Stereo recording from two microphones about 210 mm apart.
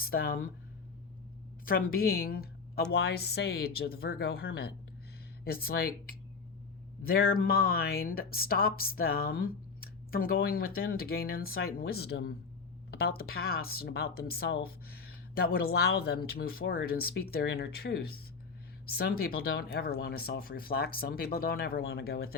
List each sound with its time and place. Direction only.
0.0 s speech: 45° left (ahead or behind)
1.6 s speech: 45° left (ahead or behind)